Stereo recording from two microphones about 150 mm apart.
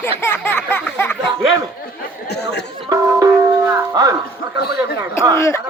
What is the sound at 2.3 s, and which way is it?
Chatter, 90° left.